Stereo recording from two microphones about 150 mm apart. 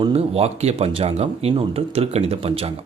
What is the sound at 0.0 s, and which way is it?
Speech, 40° right (ahead or behind).